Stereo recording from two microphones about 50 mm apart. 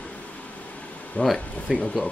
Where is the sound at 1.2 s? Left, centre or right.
Left.